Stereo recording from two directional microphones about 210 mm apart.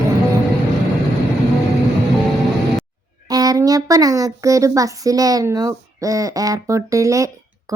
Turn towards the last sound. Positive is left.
turn(degrees=-15)  # may be behind; listen again after turning